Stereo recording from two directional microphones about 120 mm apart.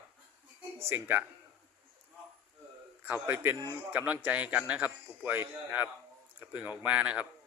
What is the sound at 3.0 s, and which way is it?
A man's voice, 15° right (ahead or behind).